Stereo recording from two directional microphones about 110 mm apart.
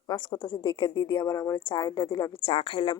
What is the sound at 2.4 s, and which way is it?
Speech, 60° left (ahead or behind).